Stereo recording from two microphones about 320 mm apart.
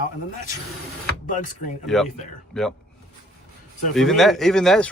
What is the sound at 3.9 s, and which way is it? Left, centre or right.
Speech, centre.